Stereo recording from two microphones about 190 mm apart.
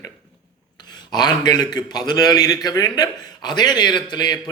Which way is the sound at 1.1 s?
20° left (ahead or behind).